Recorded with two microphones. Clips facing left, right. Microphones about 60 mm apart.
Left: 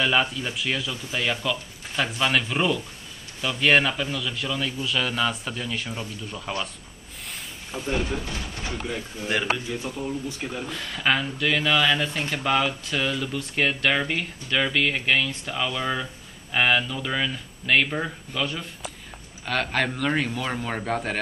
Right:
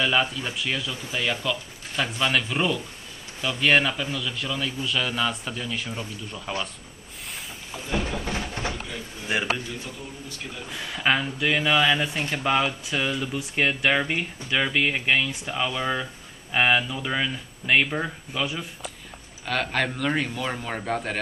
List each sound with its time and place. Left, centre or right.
0.0 s a man's voice: centre
8.2 s a sound: right
9.2 s speech: centre
9.8 s speech: left
10.7 s a man's voice: centre